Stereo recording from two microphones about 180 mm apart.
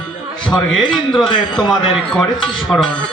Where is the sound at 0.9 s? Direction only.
5° left (ahead or behind).